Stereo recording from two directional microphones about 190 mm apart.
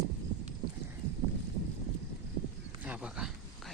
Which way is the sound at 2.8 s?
5° right (ahead or behind).